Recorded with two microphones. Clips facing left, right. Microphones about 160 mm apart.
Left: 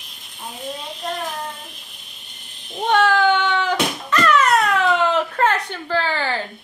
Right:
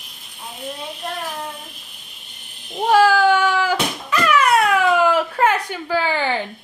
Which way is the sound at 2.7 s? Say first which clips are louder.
Right 3 dB; 5° right (ahead or behind).